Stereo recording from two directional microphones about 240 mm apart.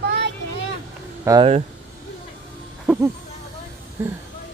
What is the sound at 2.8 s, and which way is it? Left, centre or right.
Music, centre.